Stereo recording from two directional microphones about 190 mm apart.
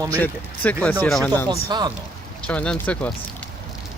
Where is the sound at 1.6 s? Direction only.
20° right (ahead or behind).